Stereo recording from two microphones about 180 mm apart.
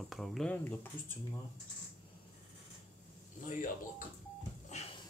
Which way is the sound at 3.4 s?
45° left (ahead or behind).